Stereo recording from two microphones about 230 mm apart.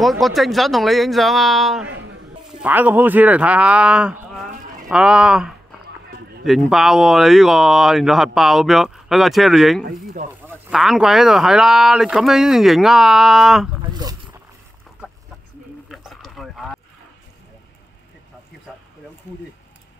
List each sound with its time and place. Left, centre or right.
0.0 s speech: centre
1.9 s a sound: right
2.5 s speech: centre
13.9 s boat: centre
15.9 s rowboat: centre